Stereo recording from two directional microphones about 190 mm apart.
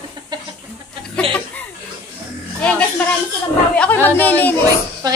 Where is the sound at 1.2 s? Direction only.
5° left (ahead or behind).